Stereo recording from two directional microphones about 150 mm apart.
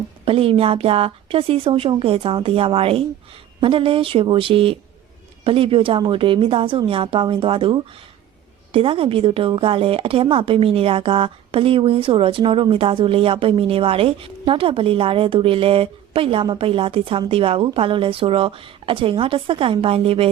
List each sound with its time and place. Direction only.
0.3 s a woman's voice: 40° right (ahead or behind)